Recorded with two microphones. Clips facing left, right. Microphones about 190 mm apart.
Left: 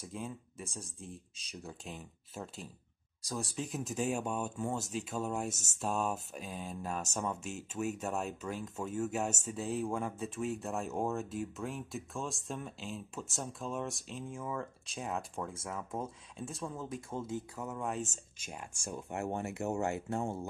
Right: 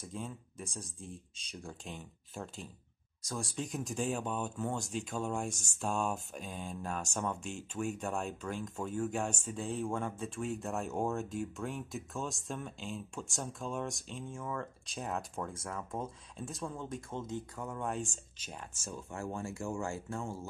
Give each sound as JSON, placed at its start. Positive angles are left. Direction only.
{"t": 0.0, "sound": "speech", "side_deg": 5}